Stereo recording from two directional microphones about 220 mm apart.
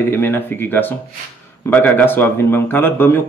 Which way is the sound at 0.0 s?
10° left (ahead or behind).